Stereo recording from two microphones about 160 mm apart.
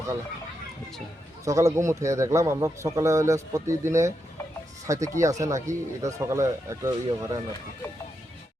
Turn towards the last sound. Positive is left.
turn(degrees=-20)  # may be behind; listen again after turning